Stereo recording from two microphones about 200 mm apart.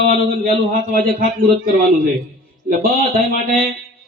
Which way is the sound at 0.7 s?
45° right (ahead or behind).